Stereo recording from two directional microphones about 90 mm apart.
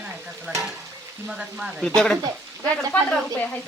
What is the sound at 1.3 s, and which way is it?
Frying, 10° right (ahead or behind).